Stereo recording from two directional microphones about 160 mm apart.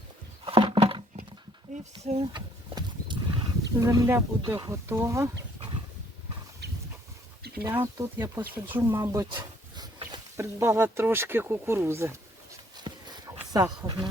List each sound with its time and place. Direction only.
0.4 s a sound: 35° right (ahead or behind)
1.7 s speech: 40° right (ahead or behind)
2.3 s wild animals: 30° right (ahead or behind)
3.8 s speech: 20° right (ahead or behind)
6.6 s a sound: 90° right
7.6 s speech: 20° right (ahead or behind)
9.3 s speech: 25° right (ahead or behind)
12.7 s a sound: 25° right (ahead or behind)
13.5 s speech: 25° right (ahead or behind)